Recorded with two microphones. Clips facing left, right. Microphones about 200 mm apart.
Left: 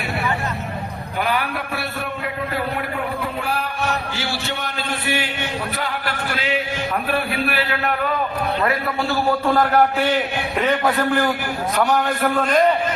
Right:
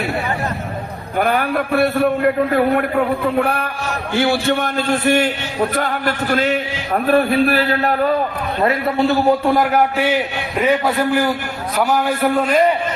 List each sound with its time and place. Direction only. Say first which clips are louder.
1.2 s a man's voice: right 6 dB; 50° right (ahead or behind)
8.6 s a man's voice: right 10 dB; 20° right (ahead or behind); by 12.6 s 5° right (ahead or behind)